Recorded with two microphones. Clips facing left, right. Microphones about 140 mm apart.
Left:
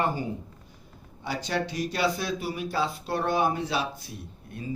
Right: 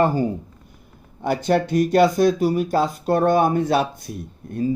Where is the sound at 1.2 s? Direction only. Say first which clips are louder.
Right 10 dB; 55° right (ahead or behind).